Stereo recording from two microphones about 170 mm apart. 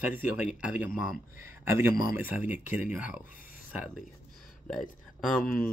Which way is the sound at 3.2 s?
55° left (ahead or behind).